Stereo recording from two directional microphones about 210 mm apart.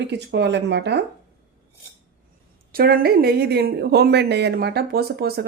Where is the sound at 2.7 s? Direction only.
45° right (ahead or behind).